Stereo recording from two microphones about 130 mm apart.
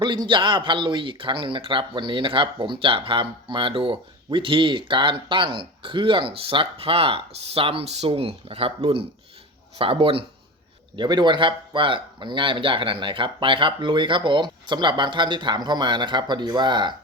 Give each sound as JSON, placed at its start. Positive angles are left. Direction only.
{"t": 0.0, "sound": "speech", "side_deg": -35}